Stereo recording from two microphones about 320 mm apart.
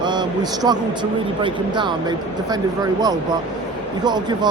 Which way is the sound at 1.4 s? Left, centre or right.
Centre.